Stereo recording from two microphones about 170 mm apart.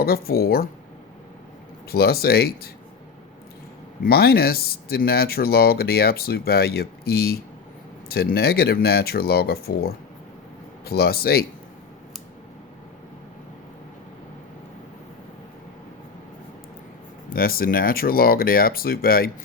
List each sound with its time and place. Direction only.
0.0 s speech: 65° left (ahead or behind)
1.9 s speech: 65° left (ahead or behind)
4.0 s speech: 65° left (ahead or behind)
17.2 s speech: 60° left (ahead or behind)